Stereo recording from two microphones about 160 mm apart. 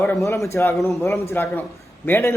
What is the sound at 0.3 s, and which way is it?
A man's voice, 20° left (ahead or behind).